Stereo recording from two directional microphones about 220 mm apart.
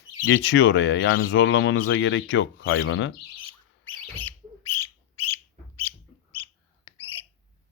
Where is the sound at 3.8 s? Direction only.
10° left (ahead or behind).